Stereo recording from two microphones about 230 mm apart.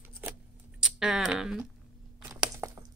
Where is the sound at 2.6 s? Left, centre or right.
Centre.